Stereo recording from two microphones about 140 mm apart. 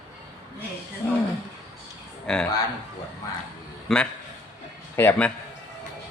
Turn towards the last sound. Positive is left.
turn(degrees=10)  # may be behind; listen again after turning